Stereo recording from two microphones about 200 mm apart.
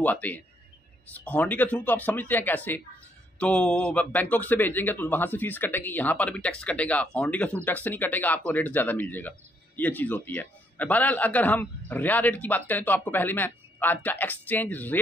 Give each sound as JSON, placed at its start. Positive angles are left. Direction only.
{"t": 0.0, "sound": "a man's voice", "side_deg": 10}